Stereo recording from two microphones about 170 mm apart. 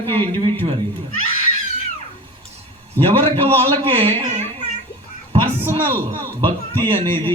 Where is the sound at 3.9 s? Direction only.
35° right (ahead or behind).